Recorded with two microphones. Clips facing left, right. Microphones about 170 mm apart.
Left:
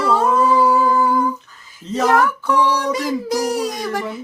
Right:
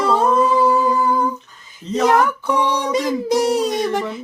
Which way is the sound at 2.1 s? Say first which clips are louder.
Even; 20° right (ahead or behind).